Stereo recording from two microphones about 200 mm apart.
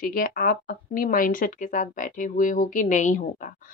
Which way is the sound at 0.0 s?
45° left (ahead or behind).